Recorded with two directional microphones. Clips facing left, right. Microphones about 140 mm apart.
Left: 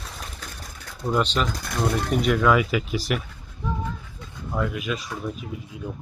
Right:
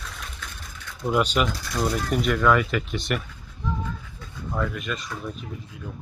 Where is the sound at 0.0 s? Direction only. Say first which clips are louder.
Left 1 dB; 35° left (ahead or behind).